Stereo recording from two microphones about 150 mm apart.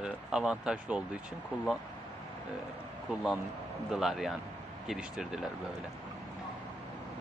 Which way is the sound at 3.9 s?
Centre (ahead or behind).